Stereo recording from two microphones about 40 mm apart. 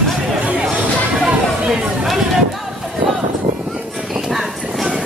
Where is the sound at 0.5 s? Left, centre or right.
Right.